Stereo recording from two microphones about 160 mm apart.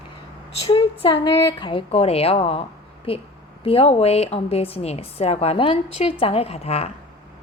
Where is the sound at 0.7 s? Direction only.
35° left (ahead or behind).